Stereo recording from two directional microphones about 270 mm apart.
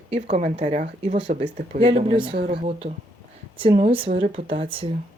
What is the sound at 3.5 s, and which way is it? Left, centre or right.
Speech, centre.